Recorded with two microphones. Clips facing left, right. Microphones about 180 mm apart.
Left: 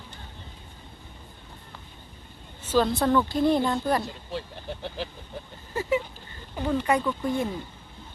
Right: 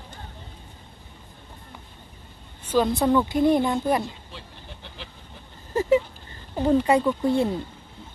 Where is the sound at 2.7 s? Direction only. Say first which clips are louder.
Right 1 dB; 5° right (ahead or behind).